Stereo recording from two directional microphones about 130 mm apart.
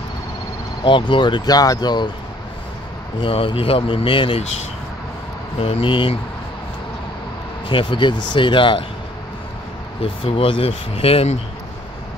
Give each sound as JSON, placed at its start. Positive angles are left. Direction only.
{"t": 0.8, "sound": "speech", "side_deg": 40}
{"t": 3.2, "sound": "speech", "side_deg": 40}
{"t": 5.6, "sound": "speech", "side_deg": 45}
{"t": 7.6, "sound": "speech", "side_deg": 40}
{"t": 10.0, "sound": "speech", "side_deg": 45}